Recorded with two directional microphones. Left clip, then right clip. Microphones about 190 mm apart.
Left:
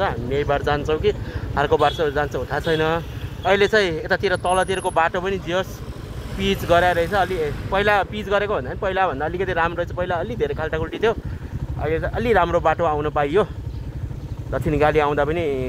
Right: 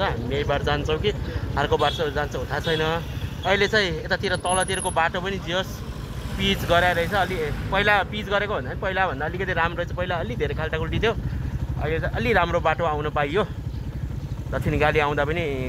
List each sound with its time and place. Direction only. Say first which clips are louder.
0.0 s speech: left 3 dB; 55° left (ahead or behind)
14.5 s speech: left 3 dB; 50° left (ahead or behind)